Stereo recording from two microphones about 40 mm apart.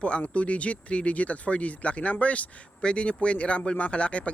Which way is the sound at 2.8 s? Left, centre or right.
Left.